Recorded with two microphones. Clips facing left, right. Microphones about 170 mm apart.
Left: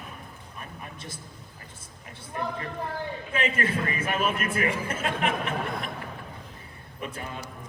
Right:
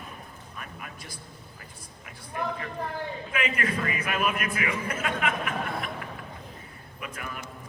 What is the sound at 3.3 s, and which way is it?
A man's voice, 30° left (ahead or behind).